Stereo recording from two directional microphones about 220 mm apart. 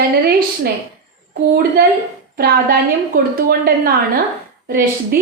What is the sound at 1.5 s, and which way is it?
A woman's voice, 45° right (ahead or behind).